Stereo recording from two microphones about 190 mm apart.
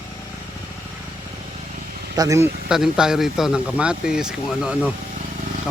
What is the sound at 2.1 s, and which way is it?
Speech, 20° right (ahead or behind).